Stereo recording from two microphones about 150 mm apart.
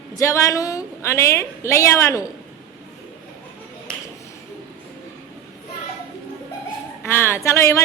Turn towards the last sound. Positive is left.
turn(degrees=15)  # may be behind; listen again after turning